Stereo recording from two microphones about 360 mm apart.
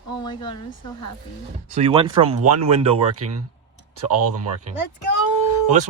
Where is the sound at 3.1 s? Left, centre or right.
Right.